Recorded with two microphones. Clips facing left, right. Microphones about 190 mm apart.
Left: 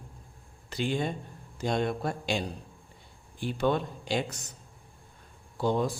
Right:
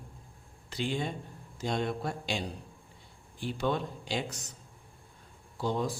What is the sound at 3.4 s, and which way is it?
Speech, 55° left (ahead or behind).